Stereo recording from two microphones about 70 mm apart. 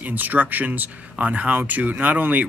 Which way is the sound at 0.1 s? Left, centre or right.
Right.